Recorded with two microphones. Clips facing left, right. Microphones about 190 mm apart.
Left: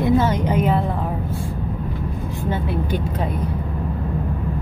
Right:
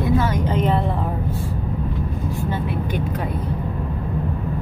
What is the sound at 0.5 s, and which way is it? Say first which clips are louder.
Speech: even; 5° left (ahead or behind).